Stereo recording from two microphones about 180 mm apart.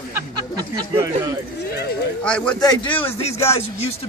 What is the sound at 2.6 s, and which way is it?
Speech, 25° left (ahead or behind).